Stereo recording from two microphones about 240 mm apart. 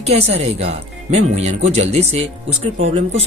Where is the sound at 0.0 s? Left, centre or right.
Right.